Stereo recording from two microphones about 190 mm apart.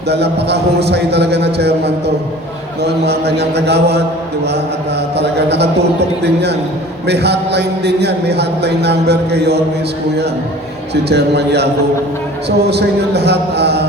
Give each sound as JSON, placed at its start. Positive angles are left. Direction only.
{"t": 0.1, "sound": "a man's voice", "side_deg": -60}
{"t": 5.1, "sound": "a man's voice", "side_deg": -60}
{"t": 10.9, "sound": "a man's voice", "side_deg": -60}